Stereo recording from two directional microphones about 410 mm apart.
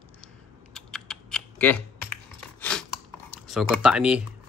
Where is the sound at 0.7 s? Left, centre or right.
Centre.